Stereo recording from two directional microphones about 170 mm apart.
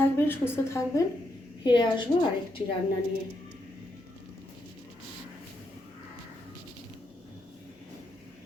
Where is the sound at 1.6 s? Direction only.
25° left (ahead or behind).